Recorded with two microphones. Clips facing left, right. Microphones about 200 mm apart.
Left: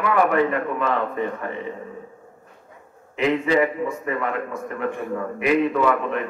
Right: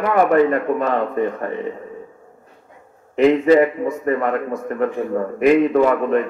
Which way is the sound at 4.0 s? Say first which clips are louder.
Right 6 dB; 40° right (ahead or behind).